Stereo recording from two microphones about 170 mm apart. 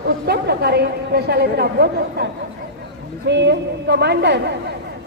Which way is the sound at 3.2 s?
90° right.